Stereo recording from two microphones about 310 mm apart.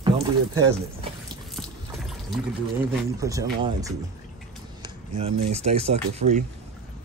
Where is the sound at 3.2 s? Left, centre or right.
Centre.